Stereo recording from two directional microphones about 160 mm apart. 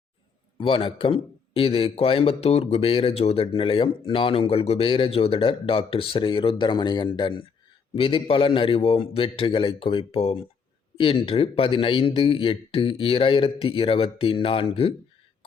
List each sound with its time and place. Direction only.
0.6 s a man's voice: 30° left (ahead or behind)